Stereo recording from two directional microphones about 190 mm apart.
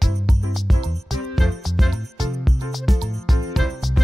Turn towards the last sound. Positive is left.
turn(degrees=0)  # may be behind; listen again after turning